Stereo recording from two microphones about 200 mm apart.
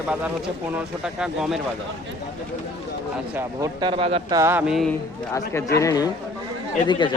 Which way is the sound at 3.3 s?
20° right (ahead or behind).